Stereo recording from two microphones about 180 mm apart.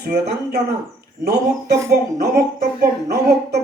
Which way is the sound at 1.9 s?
65° right (ahead or behind).